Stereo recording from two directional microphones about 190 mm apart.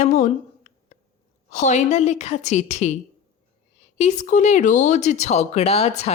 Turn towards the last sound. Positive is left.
turn(degrees=35)  # may be behind; listen again after turning